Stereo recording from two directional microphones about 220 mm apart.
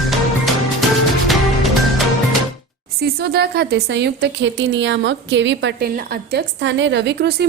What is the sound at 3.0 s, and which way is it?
A woman's voice, 45° right (ahead or behind).